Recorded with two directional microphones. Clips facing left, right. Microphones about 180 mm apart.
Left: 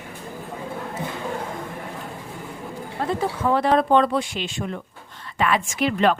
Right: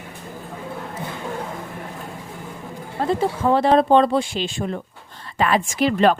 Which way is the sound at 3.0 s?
30° right (ahead or behind).